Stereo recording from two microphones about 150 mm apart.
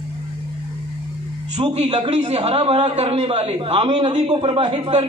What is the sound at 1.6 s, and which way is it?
A man's voice, 45° right (ahead or behind).